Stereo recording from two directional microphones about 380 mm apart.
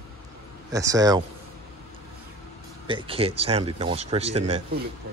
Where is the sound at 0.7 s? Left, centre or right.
Centre.